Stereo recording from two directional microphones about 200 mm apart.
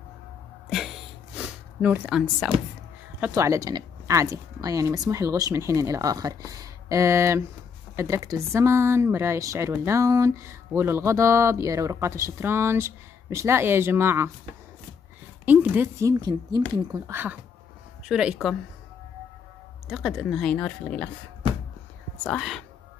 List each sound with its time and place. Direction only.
0.7 s a sound: centre (ahead or behind)
3.2 s speech: 15° right (ahead or behind)
15.4 s speech: 10° right (ahead or behind)
19.9 s speech: centre (ahead or behind)
22.2 s speech: 5° left (ahead or behind)